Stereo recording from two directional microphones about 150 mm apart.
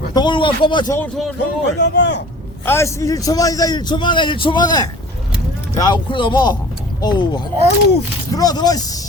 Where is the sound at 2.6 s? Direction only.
15° left (ahead or behind).